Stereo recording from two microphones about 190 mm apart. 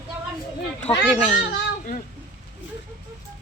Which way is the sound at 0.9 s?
Centre (ahead or behind).